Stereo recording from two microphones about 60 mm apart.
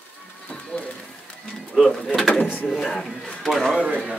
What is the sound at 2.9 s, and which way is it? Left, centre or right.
Speech, centre.